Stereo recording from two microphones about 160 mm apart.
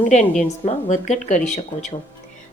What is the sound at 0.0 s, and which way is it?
A woman's voice, 50° left (ahead or behind).